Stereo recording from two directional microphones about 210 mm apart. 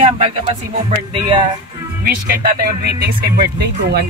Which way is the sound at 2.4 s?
45° right (ahead or behind).